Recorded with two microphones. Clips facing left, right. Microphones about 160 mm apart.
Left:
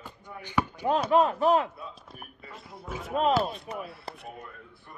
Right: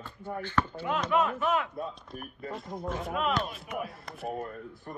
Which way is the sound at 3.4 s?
35° left (ahead or behind).